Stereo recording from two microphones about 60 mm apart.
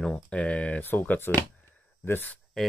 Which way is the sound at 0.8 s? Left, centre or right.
Left.